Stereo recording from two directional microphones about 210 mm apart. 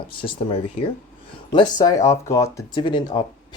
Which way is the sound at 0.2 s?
25° left (ahead or behind).